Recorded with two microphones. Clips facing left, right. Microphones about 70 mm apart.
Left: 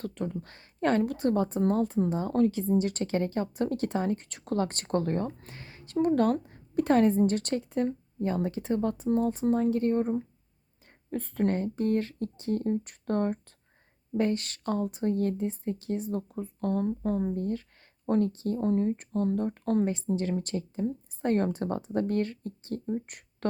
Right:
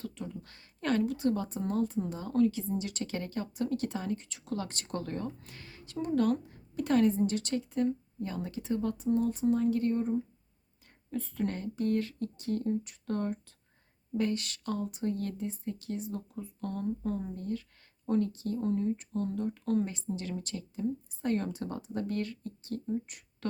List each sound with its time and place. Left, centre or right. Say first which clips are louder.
0.0 s speech: left 7 dB; left
1.0 s speech: left 4 dB; left